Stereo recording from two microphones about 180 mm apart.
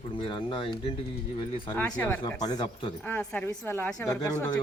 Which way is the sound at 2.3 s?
20° left (ahead or behind).